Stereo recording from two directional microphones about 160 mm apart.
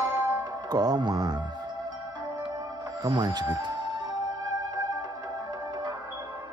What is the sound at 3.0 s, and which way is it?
Speech, 25° right (ahead or behind).